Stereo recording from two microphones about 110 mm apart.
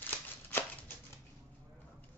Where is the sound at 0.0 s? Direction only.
15° left (ahead or behind).